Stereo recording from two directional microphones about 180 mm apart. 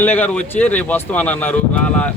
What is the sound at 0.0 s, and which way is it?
Speech, 10° left (ahead or behind).